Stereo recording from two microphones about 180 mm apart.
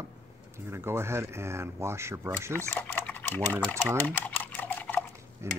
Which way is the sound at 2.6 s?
10° left (ahead or behind).